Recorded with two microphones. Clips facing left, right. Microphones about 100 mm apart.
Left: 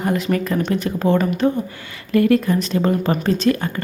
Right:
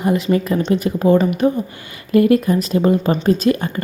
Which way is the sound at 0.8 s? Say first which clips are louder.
Right 5 dB; 15° right (ahead or behind).